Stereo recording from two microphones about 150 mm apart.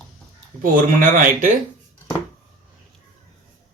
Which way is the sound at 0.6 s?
65° right (ahead or behind).